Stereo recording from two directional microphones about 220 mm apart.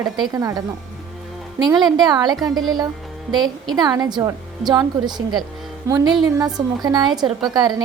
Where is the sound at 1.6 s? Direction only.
20° right (ahead or behind).